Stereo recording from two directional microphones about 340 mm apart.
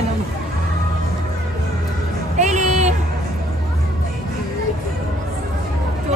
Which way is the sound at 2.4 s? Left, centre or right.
Right.